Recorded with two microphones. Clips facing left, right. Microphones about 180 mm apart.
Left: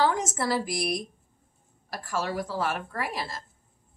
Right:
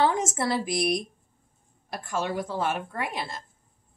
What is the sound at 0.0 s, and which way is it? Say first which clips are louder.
Speech: right 1 dB; 25° right (ahead or behind).